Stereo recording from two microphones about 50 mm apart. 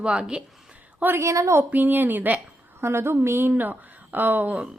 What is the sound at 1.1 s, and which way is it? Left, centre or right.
Speech, right.